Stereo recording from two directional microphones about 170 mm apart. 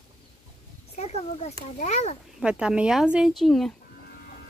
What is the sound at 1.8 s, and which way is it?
Speech, 40° left (ahead or behind).